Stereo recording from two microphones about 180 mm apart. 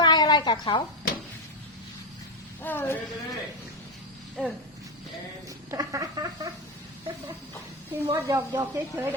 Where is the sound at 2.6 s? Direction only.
10° left (ahead or behind).